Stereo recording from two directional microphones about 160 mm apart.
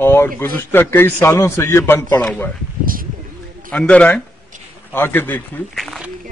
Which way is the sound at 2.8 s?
60° right (ahead or behind).